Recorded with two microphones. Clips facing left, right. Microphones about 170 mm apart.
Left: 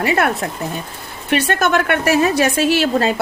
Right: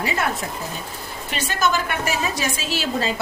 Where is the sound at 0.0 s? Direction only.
65° left (ahead or behind).